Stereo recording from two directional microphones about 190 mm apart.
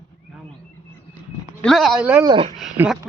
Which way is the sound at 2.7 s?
10° right (ahead or behind).